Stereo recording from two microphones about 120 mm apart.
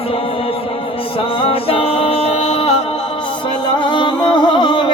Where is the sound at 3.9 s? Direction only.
40° left (ahead or behind).